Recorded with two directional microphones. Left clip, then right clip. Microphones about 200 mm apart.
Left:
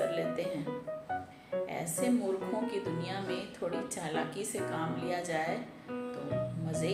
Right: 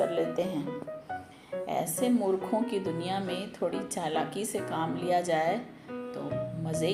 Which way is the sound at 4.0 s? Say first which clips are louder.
Right 5 dB; 40° right (ahead or behind).